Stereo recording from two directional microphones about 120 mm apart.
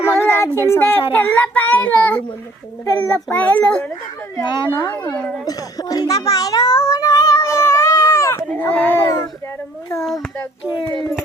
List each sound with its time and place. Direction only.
0.0 s child singing: 20° left (ahead or behind)
0.7 s a child's voice: 20° left (ahead or behind)
3.2 s a child's voice: 15° left (ahead or behind)
4.4 s speech: 40° left (ahead or behind)
5.1 s a child's voice: 10° left (ahead or behind)
5.5 s a sound: 30° left (ahead or behind)
8.7 s baby cry: 15° left (ahead or behind)